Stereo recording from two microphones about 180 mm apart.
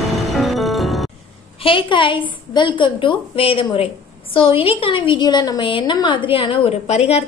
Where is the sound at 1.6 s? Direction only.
30° left (ahead or behind).